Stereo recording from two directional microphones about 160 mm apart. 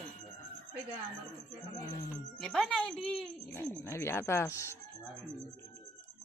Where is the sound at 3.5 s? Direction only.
15° left (ahead or behind).